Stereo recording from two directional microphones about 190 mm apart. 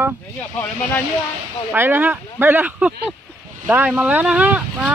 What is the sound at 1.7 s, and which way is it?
Speech, 10° right (ahead or behind).